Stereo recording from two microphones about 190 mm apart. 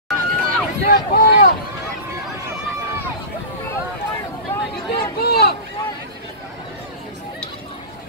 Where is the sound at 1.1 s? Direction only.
50° left (ahead or behind).